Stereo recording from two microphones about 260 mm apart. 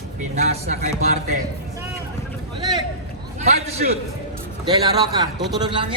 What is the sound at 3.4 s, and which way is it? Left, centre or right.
A man's voice, right.